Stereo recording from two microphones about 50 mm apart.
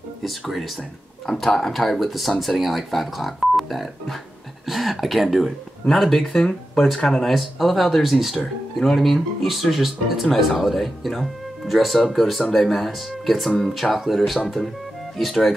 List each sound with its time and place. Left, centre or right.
0.2 s speech: centre